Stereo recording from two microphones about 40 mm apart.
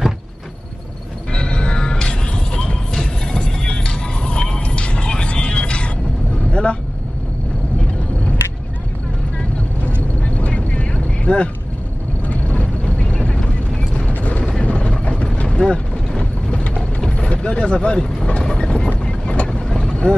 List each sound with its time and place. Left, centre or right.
1.3 s music: left
6.5 s vehicle: left
10.2 s vehicle: left
14.1 s a sound: left
14.6 s vehicle: left
17.9 s vehicle: centre
19.4 s vehicle: left